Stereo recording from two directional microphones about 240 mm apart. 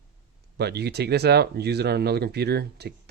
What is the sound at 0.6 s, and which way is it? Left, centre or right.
Speech, right.